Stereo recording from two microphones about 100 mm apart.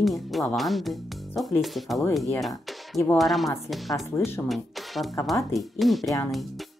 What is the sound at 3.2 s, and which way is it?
Speech, centre (ahead or behind).